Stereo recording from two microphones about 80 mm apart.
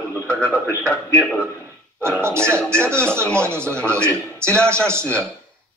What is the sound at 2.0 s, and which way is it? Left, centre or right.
Speech, right.